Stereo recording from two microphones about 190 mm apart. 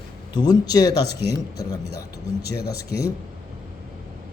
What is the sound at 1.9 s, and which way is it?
Speech, 60° left (ahead or behind).